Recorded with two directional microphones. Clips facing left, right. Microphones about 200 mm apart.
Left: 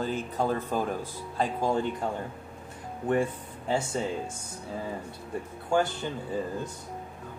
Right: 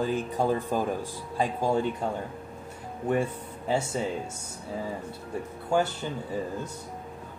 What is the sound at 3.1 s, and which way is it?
Speech, 10° right (ahead or behind).